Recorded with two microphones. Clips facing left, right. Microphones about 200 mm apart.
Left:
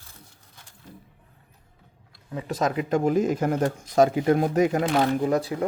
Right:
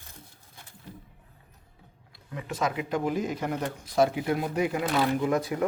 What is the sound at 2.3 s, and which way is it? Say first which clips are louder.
Speech: left 4 dB; 40° left (ahead or behind).